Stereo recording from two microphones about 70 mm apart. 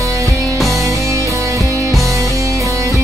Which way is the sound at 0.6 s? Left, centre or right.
Centre.